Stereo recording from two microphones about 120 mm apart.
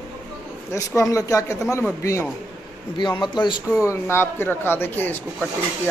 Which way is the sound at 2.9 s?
40° left (ahead or behind).